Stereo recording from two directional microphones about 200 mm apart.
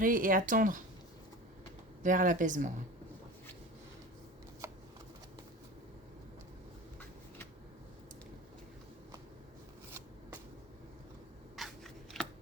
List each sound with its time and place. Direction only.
0.0 s speech: 45° right (ahead or behind)
2.0 s speech: 40° right (ahead or behind)
11.5 s shuffling cards: centre (ahead or behind)